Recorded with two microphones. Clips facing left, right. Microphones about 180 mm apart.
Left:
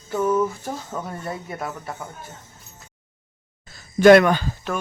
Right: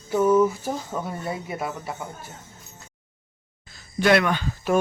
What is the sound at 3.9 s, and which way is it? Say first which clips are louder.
Speech: left 8 dB; 45° left (ahead or behind).